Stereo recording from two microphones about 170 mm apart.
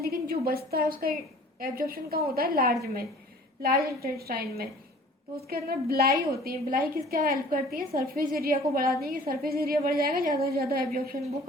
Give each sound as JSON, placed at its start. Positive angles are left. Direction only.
{"t": 0.0, "sound": "a woman's voice", "side_deg": -65}